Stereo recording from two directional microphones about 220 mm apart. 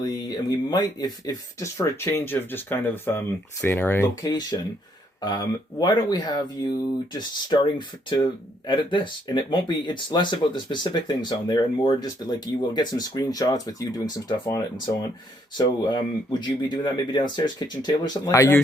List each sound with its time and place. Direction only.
0.0 s speech: 20° left (ahead or behind)